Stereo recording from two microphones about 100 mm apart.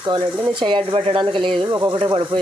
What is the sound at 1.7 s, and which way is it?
Speech, 45° right (ahead or behind).